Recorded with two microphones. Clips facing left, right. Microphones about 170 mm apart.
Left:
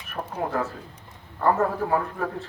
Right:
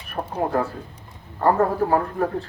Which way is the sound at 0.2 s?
40° right (ahead or behind).